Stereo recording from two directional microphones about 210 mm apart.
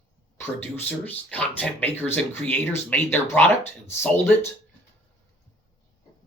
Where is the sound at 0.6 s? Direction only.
10° left (ahead or behind).